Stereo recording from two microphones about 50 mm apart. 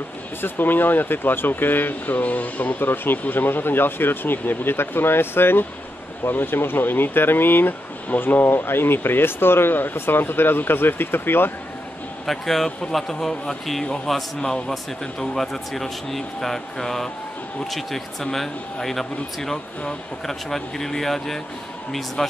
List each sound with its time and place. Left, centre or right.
0.4 s speech: left
2.8 s speech: left
12.3 s speech: centre